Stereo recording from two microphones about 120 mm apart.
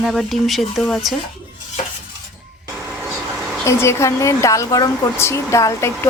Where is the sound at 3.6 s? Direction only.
20° left (ahead or behind).